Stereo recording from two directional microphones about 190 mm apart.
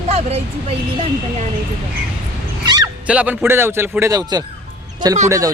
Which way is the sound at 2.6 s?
20° right (ahead or behind).